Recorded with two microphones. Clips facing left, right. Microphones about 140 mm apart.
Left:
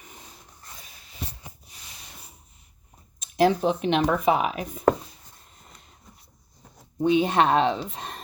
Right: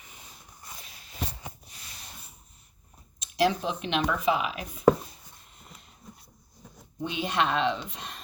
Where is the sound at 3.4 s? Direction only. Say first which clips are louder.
Left 5 dB; 45° left (ahead or behind).